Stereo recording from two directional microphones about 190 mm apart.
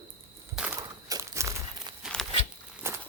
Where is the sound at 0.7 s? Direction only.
15° right (ahead or behind).